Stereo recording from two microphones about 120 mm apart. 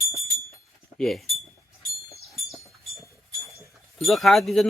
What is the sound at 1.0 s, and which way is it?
Speech, centre (ahead or behind).